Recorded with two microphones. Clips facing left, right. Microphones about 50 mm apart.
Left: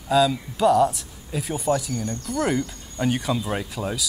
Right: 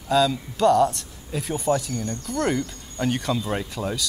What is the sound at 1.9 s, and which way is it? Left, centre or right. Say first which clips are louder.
Speech: left 1 dB; centre.